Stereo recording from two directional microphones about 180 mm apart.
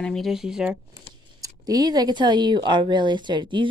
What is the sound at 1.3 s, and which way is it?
Speech, 20° right (ahead or behind).